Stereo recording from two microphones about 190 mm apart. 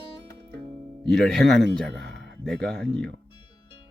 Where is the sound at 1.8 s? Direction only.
65° right (ahead or behind).